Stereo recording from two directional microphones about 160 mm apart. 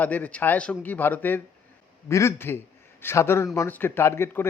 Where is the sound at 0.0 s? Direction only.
10° left (ahead or behind).